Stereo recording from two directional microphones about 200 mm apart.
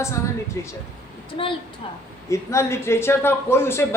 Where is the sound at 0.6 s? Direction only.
15° left (ahead or behind).